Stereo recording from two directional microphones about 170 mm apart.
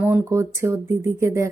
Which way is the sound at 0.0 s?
15° right (ahead or behind).